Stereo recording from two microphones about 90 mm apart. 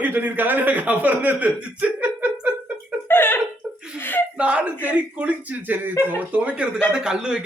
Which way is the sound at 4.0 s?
20° left (ahead or behind).